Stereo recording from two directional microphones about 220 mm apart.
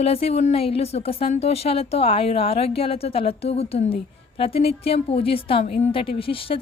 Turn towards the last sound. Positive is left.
turn(degrees=25)  # may be behind; listen again after turning